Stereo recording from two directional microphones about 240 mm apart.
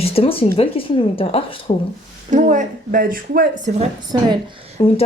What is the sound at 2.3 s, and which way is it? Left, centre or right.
Speech, right.